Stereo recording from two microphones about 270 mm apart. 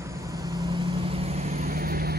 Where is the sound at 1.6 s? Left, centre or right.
Right.